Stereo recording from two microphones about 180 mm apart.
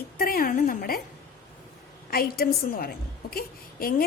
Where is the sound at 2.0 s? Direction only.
60° left (ahead or behind).